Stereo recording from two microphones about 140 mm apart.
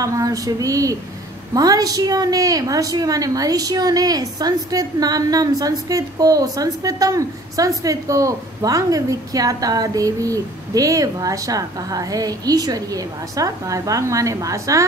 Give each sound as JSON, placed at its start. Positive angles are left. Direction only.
{"t": 0.0, "sound": "a woman's voice", "side_deg": -25}